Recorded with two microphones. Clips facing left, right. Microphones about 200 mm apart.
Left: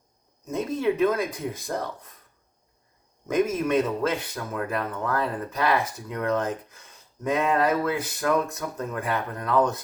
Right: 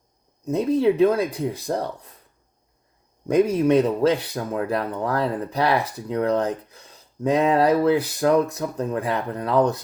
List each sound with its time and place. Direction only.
0.4 s speech: 35° right (ahead or behind)
3.2 s speech: 35° right (ahead or behind)